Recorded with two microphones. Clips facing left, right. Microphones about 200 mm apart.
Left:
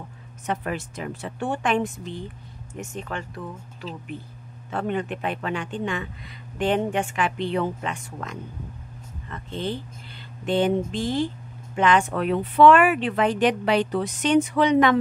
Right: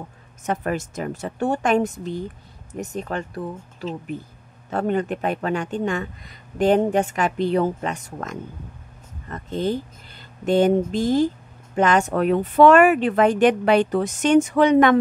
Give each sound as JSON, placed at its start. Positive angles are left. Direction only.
{"t": 0.5, "sound": "speech", "side_deg": -45}